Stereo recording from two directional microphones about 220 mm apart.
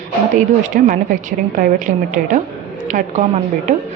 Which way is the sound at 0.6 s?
35° right (ahead or behind).